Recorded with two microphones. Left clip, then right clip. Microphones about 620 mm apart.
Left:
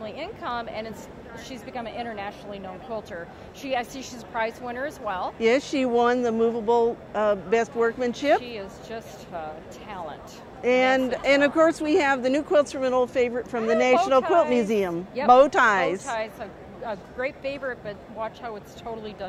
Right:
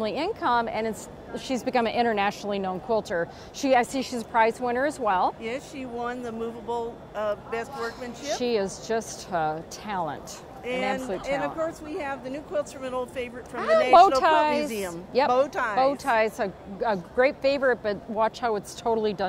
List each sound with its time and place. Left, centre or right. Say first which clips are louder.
0.0 s a woman's voice: right 7 dB; right
5.4 s speech: left 12 dB; left
8.5 s a woman's voice: right 9 dB; right
10.6 s speech: left 8 dB; left
14.5 s a woman's voice: left 4 dB; left
16.1 s a woman's voice: right 7 dB; right